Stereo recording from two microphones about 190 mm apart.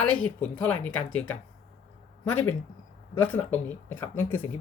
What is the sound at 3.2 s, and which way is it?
A woman's voice, 10° left (ahead or behind).